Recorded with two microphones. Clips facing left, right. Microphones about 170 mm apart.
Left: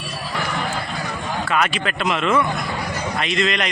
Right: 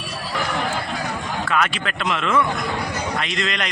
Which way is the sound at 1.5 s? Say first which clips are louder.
Left 1 dB; 10° left (ahead or behind).